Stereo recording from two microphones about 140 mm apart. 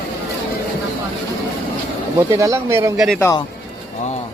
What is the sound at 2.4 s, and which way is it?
Speech, 20° right (ahead or behind).